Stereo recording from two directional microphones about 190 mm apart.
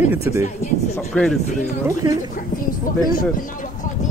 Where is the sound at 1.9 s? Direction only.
20° right (ahead or behind).